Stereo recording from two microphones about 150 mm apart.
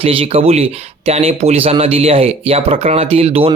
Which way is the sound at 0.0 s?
40° right (ahead or behind).